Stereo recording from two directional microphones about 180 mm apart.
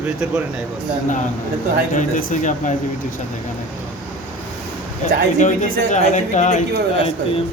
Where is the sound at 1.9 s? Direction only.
45° left (ahead or behind).